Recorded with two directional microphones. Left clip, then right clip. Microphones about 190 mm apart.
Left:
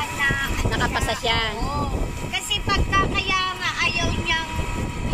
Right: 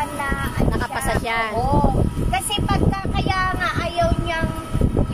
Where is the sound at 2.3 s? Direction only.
65° right (ahead or behind).